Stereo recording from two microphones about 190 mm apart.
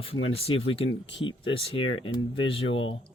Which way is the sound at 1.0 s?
70° left (ahead or behind).